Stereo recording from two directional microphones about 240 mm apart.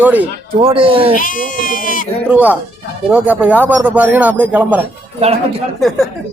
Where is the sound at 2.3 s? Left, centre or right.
Centre.